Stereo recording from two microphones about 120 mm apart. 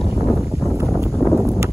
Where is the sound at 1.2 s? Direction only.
Centre (ahead or behind).